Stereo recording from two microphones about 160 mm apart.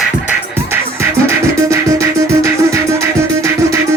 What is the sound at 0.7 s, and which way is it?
Music, 15° right (ahead or behind).